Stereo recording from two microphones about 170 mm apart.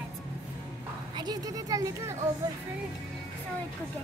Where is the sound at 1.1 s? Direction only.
25° right (ahead or behind).